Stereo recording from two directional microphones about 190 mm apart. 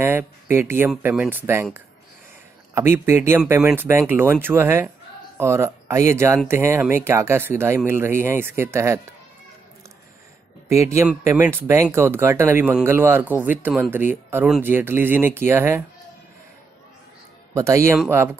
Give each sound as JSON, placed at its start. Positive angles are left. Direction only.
{"t": 0.0, "sound": "speech", "side_deg": -10}
{"t": 10.7, "sound": "speech", "side_deg": -15}
{"t": 17.6, "sound": "speech", "side_deg": -15}